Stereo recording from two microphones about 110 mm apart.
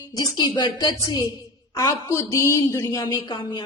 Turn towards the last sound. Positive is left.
turn(degrees=45)  # may be behind; listen again after turning